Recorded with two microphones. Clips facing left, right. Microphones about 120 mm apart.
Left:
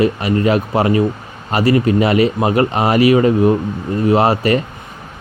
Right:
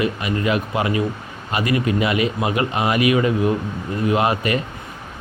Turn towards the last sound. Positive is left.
turn(degrees=35)  # may be behind; listen again after turning